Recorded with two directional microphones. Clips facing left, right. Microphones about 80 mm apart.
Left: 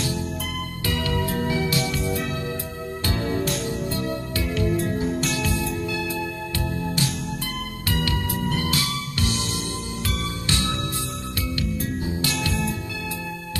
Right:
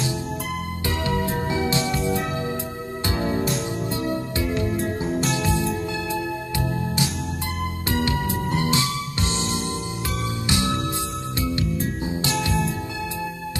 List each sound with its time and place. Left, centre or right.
0.8 s music: right
3.1 s music: centre
4.6 s music: centre
7.9 s music: right